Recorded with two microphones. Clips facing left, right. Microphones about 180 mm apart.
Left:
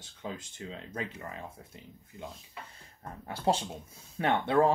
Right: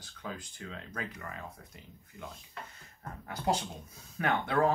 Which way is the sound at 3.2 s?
30° left (ahead or behind).